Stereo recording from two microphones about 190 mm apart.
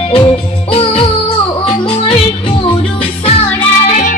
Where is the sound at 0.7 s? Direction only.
30° left (ahead or behind).